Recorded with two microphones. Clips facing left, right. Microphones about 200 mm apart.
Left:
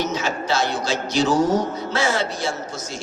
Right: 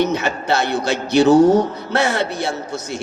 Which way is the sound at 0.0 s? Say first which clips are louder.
Right 5 dB; 60° right (ahead or behind).